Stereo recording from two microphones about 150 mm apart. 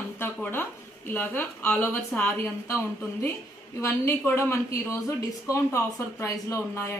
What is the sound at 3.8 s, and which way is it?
Speech, 20° left (ahead or behind).